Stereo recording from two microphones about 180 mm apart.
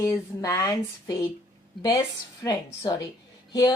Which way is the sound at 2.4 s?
20° left (ahead or behind).